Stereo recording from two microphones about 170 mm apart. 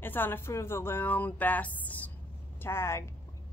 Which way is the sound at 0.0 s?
10° left (ahead or behind).